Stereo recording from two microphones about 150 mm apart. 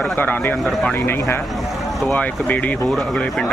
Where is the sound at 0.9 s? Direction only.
15° left (ahead or behind).